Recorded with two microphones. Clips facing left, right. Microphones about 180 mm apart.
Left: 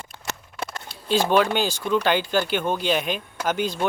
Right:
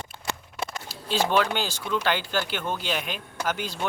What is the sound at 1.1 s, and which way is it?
Speech, 15° left (ahead or behind).